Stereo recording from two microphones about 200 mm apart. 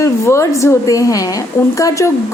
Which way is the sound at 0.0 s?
15° left (ahead or behind).